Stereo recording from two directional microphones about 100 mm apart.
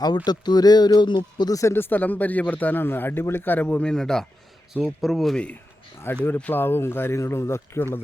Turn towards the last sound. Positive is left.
turn(degrees=25)  # may be behind; listen again after turning